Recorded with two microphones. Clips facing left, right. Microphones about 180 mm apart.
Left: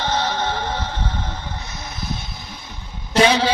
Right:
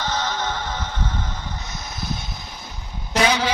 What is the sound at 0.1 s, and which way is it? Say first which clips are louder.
Music: left 3 dB; 30° left (ahead or behind).